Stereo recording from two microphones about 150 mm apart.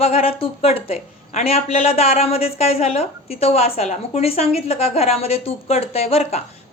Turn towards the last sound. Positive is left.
turn(degrees=40)  # may be behind; listen again after turning